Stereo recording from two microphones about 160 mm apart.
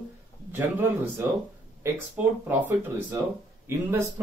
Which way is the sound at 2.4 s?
15° right (ahead or behind).